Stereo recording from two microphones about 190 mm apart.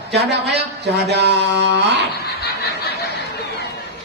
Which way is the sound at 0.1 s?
60° right (ahead or behind).